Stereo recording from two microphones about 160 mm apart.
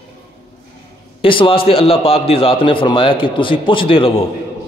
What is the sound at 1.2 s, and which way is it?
A man's voice, 35° left (ahead or behind).